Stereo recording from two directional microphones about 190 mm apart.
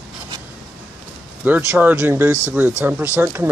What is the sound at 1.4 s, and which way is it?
Speech, 10° right (ahead or behind).